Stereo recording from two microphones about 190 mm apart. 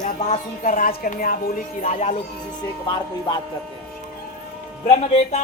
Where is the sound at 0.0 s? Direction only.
40° left (ahead or behind).